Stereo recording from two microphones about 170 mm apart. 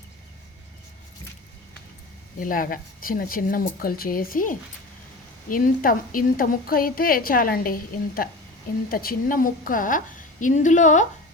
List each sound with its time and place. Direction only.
2.4 s a woman's voice: 55° left (ahead or behind)